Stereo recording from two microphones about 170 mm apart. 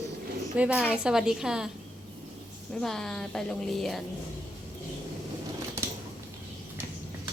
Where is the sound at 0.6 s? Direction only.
5° right (ahead or behind).